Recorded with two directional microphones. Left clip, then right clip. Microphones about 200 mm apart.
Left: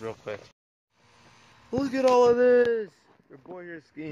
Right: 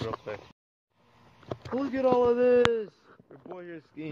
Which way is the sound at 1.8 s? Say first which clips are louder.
Left 4 dB; 15° left (ahead or behind).